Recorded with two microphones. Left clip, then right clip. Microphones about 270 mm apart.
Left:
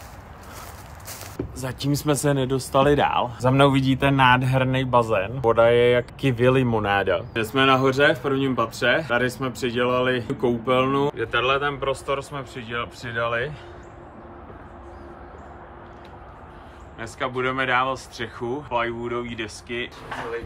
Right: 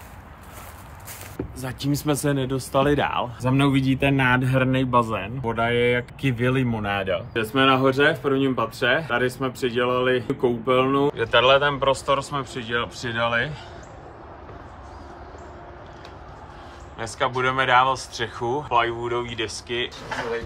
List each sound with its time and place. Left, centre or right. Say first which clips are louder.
1.6 s speech: left 1 dB; centre
3.4 s speech: left 4 dB; centre
7.3 s speech: right 1 dB; centre
17.0 s speech: right 3 dB; centre